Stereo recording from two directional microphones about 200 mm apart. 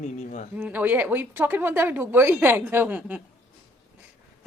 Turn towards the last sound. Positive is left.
turn(degrees=-10)  # may be behind; listen again after turning